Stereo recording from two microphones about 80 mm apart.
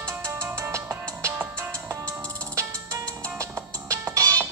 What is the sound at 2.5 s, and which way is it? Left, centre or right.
Music, right.